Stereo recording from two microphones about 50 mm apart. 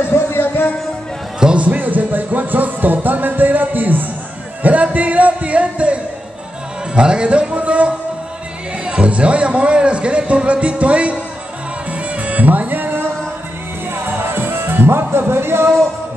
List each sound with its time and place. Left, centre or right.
0.0 s music: left
1.4 s music: right
4.6 s speech: right
7.0 s speech: right
11.9 s music: right